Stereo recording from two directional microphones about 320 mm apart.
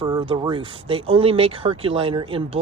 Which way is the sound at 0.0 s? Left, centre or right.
Centre.